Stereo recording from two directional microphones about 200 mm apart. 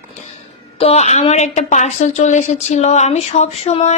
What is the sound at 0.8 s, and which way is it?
A woman's voice, 35° left (ahead or behind).